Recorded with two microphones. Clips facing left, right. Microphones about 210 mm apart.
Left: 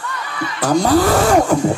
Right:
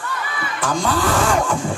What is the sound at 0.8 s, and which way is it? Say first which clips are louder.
Music: left 5 dB; 40° left (ahead or behind).